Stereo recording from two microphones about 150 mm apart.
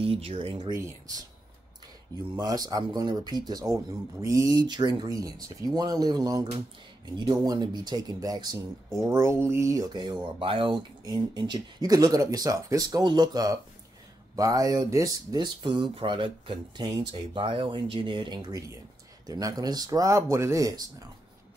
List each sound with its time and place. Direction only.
0.0 s speech: 40° right (ahead or behind)
0.7 s speech: 20° right (ahead or behind)
2.3 s speech: 25° right (ahead or behind)
10.2 s speech: 35° right (ahead or behind)